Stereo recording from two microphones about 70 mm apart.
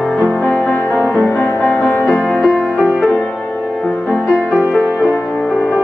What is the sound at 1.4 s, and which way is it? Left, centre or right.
Music, left.